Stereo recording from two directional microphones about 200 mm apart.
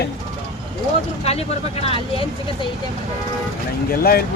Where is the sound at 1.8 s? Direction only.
25° left (ahead or behind).